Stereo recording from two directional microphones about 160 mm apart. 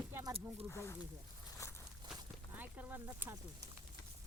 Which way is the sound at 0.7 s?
15° left (ahead or behind).